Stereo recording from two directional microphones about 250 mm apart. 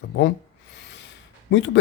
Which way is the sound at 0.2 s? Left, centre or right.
Left.